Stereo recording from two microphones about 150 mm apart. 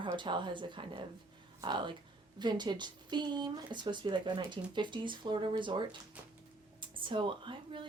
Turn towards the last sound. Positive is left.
turn(degrees=-35)  # may be behind; listen again after turning